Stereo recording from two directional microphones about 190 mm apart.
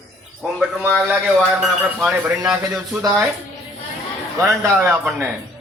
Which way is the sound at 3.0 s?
10° right (ahead or behind).